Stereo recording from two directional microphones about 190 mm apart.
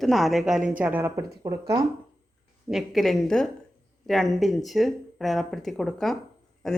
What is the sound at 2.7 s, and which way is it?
Speech, centre (ahead or behind).